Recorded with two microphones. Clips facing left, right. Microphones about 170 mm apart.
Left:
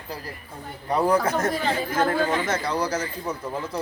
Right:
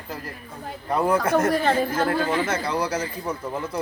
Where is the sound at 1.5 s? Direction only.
55° right (ahead or behind).